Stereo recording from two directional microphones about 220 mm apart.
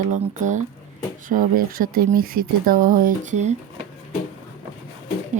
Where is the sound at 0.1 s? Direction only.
35° right (ahead or behind).